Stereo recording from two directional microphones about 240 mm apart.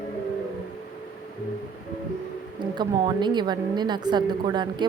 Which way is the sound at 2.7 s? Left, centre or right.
Centre.